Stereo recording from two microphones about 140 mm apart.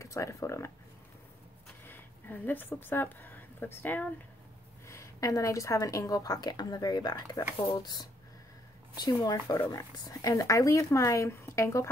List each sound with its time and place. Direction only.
0.0 s speech: 20° left (ahead or behind)
1.9 s a woman's voice: 15° left (ahead or behind)